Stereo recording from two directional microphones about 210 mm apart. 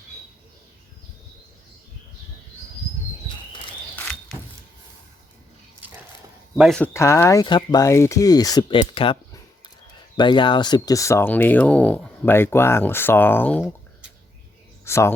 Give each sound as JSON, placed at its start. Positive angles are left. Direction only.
{"t": 3.9, "sound": "a sound", "side_deg": 5}
{"t": 6.6, "sound": "speech", "side_deg": 0}
{"t": 10.2, "sound": "speech", "side_deg": 20}
{"t": 14.8, "sound": "speech", "side_deg": 10}